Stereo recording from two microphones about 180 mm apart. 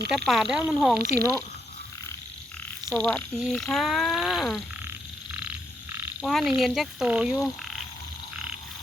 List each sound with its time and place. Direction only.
0.3 s speech: centre (ahead or behind)
0.9 s speech: 60° right (ahead or behind)
3.0 s speech: 5° left (ahead or behind)
4.9 s frog: 10° right (ahead or behind)
6.6 s speech: centre (ahead or behind)